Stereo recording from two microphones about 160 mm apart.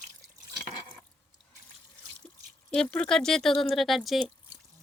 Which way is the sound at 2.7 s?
5° left (ahead or behind).